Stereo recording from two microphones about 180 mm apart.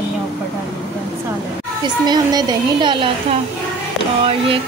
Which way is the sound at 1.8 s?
20° right (ahead or behind).